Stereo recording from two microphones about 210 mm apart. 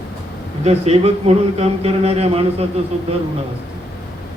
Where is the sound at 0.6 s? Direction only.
30° right (ahead or behind).